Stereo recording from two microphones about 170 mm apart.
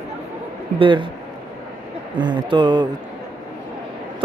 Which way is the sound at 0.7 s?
30° right (ahead or behind).